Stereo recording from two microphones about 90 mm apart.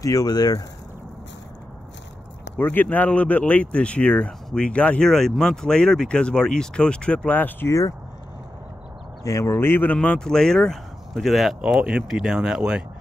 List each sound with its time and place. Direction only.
0.0 s speech: 40° left (ahead or behind)
2.5 s speech: 20° left (ahead or behind)
7.6 s speech: 35° left (ahead or behind)
9.2 s speech: 35° left (ahead or behind)
9.9 s speech: 10° left (ahead or behind); by 12.8 s 10° right (ahead or behind)